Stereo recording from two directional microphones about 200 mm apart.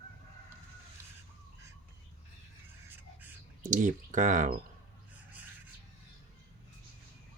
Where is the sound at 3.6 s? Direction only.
40° right (ahead or behind).